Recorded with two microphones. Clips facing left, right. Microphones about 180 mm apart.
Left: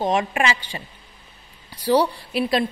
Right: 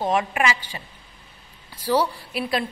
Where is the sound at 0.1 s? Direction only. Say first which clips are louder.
Left 1 dB; 25° left (ahead or behind).